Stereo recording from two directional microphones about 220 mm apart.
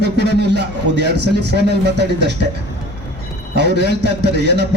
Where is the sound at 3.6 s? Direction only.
50° right (ahead or behind).